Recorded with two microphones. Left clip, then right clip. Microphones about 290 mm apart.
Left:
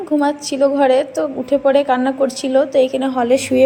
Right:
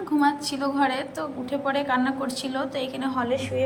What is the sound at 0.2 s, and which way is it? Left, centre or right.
A woman's voice, centre.